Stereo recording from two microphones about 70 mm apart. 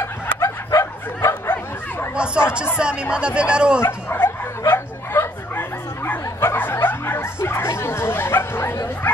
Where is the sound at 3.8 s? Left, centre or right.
Left.